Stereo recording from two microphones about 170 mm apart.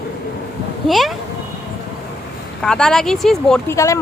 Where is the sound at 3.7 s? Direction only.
20° left (ahead or behind).